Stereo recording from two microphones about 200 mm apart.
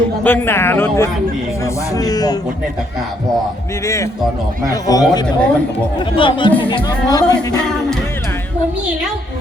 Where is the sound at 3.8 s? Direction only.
15° left (ahead or behind).